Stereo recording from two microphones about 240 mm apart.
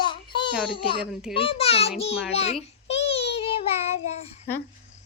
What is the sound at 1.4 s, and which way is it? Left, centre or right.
Speech, left.